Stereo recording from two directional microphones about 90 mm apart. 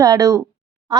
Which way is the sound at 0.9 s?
50° right (ahead or behind).